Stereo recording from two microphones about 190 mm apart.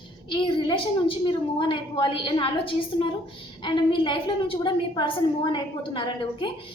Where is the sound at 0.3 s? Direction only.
25° left (ahead or behind).